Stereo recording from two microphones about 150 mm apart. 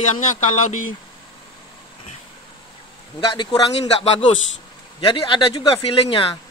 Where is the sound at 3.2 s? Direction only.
35° left (ahead or behind).